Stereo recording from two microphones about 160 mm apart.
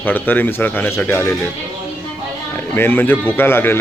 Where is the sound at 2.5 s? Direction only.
10° left (ahead or behind).